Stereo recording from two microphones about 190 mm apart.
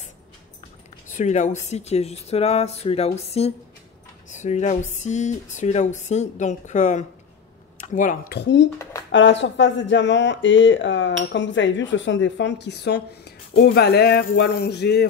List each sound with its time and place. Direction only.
1.0 s speech: 40° left (ahead or behind); by 15.0 s 60° left (ahead or behind)